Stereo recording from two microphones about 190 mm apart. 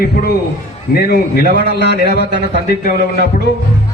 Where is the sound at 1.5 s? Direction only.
60° right (ahead or behind).